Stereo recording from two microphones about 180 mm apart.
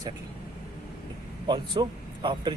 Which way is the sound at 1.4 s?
25° right (ahead or behind).